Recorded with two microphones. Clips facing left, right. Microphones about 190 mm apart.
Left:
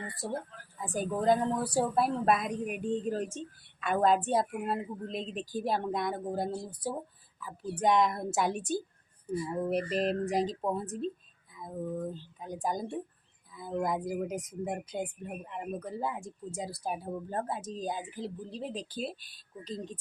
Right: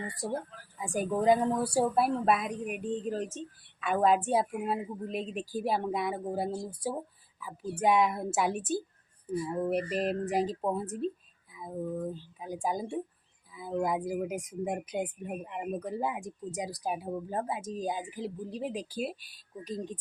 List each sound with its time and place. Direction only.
0.2 s a woman's voice: 10° right (ahead or behind)